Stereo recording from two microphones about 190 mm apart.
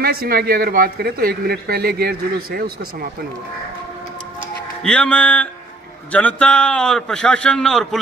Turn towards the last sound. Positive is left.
turn(degrees=5)  # may be behind; listen again after turning